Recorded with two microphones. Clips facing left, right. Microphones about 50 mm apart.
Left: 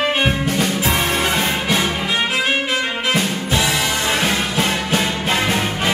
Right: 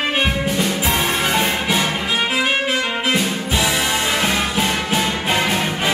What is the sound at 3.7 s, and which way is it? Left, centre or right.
Music, right.